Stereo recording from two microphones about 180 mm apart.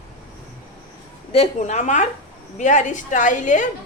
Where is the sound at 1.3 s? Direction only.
35° left (ahead or behind).